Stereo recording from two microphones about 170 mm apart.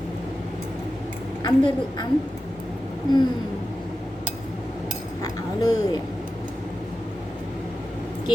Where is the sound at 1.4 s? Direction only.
25° left (ahead or behind).